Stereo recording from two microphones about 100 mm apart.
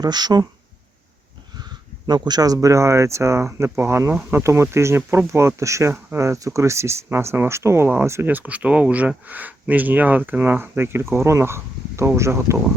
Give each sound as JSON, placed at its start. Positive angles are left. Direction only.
{"t": 0.0, "sound": "speech", "side_deg": -45}
{"t": 2.0, "sound": "speech", "side_deg": -45}